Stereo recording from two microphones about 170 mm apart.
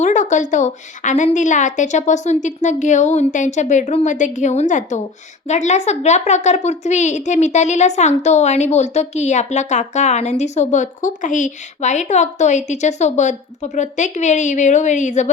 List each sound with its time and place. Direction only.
0.0 s a woman's voice: 45° left (ahead or behind)